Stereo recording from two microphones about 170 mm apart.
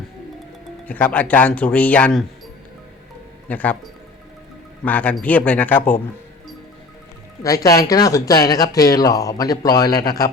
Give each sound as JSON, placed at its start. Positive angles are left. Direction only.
{"t": 0.9, "sound": "speech", "side_deg": 10}
{"t": 3.5, "sound": "speech", "side_deg": 10}
{"t": 4.9, "sound": "speech", "side_deg": 10}
{"t": 7.4, "sound": "speech", "side_deg": 20}